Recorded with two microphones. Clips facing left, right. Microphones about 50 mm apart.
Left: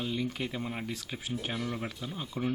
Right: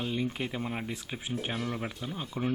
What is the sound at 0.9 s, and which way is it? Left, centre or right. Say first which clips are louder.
Speech: right 1 dB; right.